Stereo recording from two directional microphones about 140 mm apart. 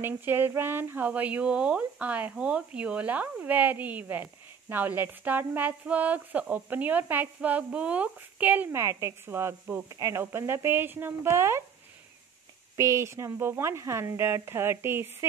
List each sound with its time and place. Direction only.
0.0 s speech: 15° right (ahead or behind)
12.7 s speech: 20° right (ahead or behind)